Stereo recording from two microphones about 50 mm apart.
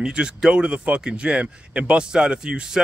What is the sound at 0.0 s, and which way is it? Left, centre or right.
Speech, centre.